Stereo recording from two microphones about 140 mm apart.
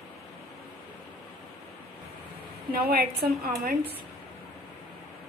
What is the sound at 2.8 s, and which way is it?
Speech, 90° right.